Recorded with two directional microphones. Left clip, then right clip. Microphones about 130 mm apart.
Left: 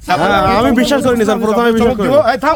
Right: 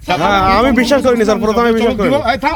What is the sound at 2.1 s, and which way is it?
Speech, 40° left (ahead or behind).